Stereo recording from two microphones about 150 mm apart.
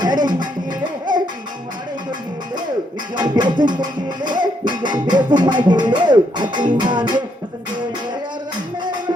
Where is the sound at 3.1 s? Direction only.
30° right (ahead or behind).